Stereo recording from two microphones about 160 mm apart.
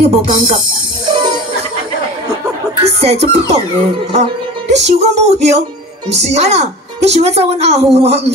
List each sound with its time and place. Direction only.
0.0 s a woman's voice: 40° right (ahead or behind)
1.0 s music: 25° right (ahead or behind)
2.8 s a woman's voice: 40° right (ahead or behind)
4.1 s music: 45° right (ahead or behind)
6.2 s a woman's voice: 45° right (ahead or behind)